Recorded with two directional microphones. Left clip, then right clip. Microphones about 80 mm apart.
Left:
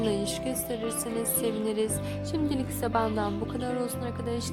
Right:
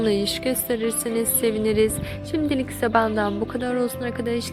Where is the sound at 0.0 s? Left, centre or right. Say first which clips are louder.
Right 7 dB; right.